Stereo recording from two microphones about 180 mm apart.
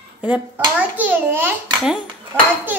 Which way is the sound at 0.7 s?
10° right (ahead or behind).